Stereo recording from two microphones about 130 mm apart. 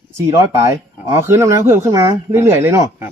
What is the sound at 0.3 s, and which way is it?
Speech, 25° right (ahead or behind).